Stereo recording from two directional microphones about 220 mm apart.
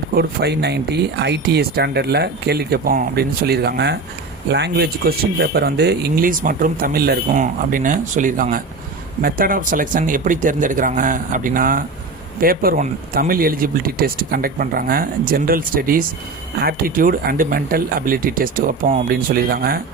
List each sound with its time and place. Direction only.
0.1 s speech: 45° right (ahead or behind)